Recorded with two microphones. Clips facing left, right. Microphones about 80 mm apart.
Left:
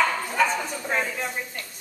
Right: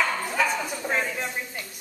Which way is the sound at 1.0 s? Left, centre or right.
Centre.